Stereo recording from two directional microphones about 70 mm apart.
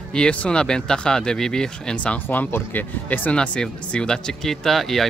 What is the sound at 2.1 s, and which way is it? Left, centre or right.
Speech, left.